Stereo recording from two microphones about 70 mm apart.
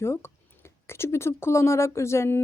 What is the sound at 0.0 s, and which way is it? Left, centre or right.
Speech, left.